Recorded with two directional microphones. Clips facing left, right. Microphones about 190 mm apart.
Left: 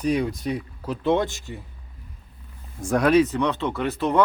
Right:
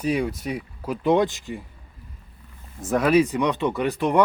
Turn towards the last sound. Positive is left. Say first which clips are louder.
# right 1 dB
turn(degrees=-15)  # may be behind; listen again after turning